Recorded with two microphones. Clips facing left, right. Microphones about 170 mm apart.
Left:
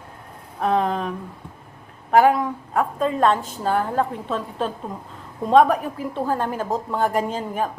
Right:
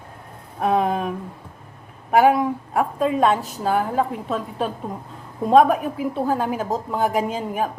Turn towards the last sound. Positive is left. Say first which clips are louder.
# right 1 dB
turn(degrees=-5)  # may be behind; listen again after turning